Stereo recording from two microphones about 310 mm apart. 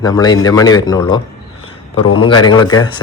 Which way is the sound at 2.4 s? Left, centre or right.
Centre.